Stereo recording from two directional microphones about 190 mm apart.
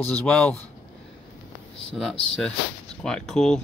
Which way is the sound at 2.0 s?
Centre (ahead or behind).